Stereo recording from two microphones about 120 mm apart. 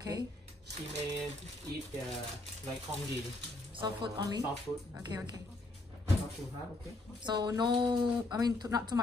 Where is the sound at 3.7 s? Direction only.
45° right (ahead or behind).